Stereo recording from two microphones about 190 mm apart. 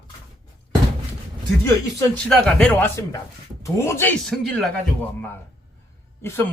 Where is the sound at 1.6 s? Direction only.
10° left (ahead or behind).